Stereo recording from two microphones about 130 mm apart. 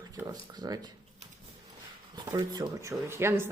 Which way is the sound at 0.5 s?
30° right (ahead or behind).